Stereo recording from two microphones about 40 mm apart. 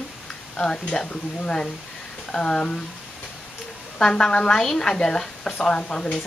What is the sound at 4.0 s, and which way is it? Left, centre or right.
A woman's voice, centre.